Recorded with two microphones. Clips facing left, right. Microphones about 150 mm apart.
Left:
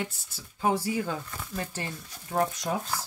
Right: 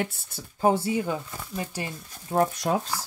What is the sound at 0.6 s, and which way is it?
Speech, 25° right (ahead or behind).